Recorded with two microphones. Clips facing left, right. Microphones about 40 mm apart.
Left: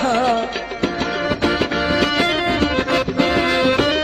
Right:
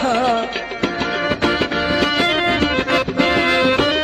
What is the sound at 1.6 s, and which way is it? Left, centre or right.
Music, centre.